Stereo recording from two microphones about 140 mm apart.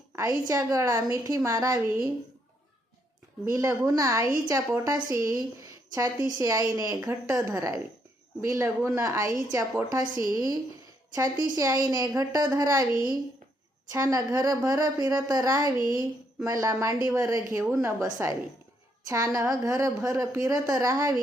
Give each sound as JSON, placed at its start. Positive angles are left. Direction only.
{"t": 0.2, "sound": "speech", "side_deg": -25}
{"t": 3.4, "sound": "speech", "side_deg": -20}